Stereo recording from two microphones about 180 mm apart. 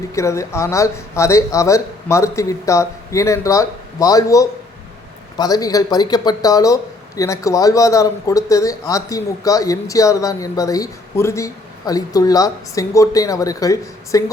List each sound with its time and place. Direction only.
0.1 s speech: 15° left (ahead or behind)